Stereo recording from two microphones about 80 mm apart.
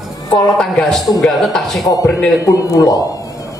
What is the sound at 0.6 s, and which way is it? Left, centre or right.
A man's voice, centre.